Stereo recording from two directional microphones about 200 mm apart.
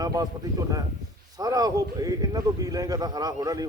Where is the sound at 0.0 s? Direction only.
20° right (ahead or behind).